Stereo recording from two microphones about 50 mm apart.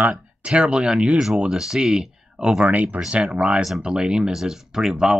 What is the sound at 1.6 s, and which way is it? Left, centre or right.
Speech, centre.